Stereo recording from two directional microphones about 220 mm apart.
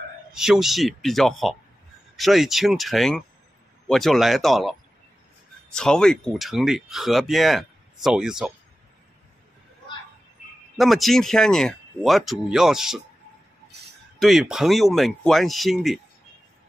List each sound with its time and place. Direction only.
0.3 s speech: centre (ahead or behind)
10.8 s speech: centre (ahead or behind)
14.2 s speech: centre (ahead or behind)